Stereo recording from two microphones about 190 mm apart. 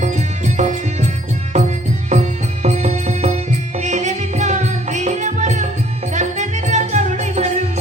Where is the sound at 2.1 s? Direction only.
35° right (ahead or behind).